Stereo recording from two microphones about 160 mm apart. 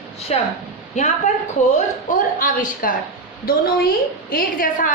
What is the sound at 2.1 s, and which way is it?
A woman's voice, 55° left (ahead or behind).